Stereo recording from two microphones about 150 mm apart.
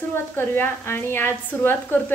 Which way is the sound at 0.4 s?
15° left (ahead or behind).